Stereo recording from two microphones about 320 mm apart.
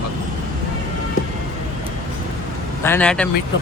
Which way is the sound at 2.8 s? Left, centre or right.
Centre.